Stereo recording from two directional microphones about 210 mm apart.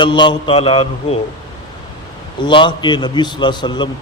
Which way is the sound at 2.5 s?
20° left (ahead or behind).